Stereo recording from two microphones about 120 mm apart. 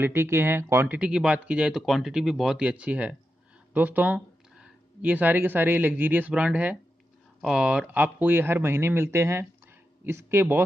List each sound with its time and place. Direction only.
0.0 s speech: 20° right (ahead or behind)